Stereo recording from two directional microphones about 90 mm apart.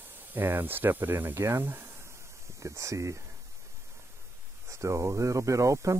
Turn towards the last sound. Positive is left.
turn(degrees=-35)  # may be behind; listen again after turning